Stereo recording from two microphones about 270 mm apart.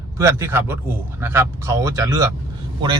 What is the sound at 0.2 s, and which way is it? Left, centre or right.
Speech, centre.